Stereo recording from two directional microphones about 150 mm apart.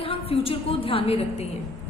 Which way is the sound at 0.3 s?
40° left (ahead or behind).